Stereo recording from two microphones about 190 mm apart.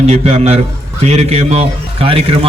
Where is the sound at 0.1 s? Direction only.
35° right (ahead or behind).